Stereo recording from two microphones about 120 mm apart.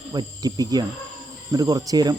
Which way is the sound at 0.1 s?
35° right (ahead or behind).